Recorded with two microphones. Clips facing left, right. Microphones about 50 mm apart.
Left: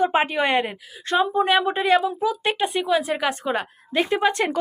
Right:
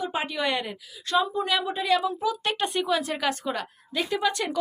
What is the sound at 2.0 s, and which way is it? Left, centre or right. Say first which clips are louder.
A woman's voice: left 4 dB; left.